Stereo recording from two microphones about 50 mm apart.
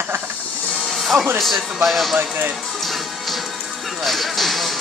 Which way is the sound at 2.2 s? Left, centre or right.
Right.